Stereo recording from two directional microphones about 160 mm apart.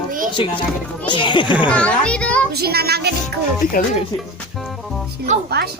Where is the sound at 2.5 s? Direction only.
80° right.